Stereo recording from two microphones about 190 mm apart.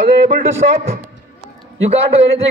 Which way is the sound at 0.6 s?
60° right (ahead or behind).